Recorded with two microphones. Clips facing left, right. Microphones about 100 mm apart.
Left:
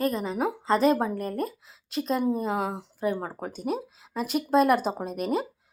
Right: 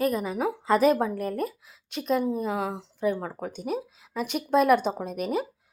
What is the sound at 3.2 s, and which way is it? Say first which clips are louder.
Speech: even; 30° left (ahead or behind).